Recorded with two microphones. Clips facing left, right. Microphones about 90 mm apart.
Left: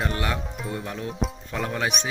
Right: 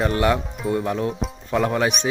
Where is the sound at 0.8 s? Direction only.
65° right (ahead or behind).